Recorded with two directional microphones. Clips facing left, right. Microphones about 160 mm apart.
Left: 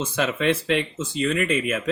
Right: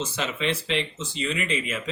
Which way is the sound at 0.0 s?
50° left (ahead or behind).